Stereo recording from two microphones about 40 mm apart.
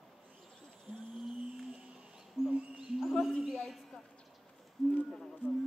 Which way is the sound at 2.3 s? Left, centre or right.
Right.